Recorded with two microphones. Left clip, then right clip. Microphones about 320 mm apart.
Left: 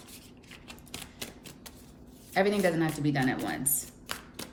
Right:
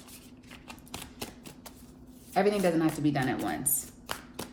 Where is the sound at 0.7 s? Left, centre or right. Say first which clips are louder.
Right 1 dB; centre.